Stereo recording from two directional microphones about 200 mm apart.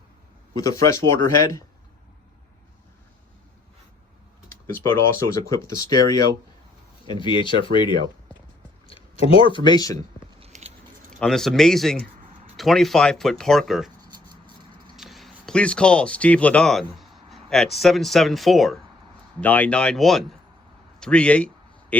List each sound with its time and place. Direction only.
0.5 s speech: 15° left (ahead or behind)
4.6 s speech: 15° left (ahead or behind)
7.1 s speech: 25° left (ahead or behind)
10.4 s a sound: 35° right (ahead or behind)
11.2 s speech: centre (ahead or behind)
14.9 s speech: centre (ahead or behind)
21.0 s a sound: 5° left (ahead or behind)